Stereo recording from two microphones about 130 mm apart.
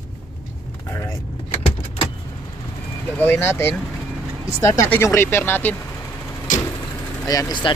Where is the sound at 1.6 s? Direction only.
45° left (ahead or behind).